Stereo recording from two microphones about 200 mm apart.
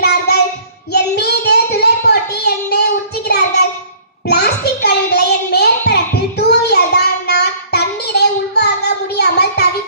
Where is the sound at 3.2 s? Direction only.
55° left (ahead or behind).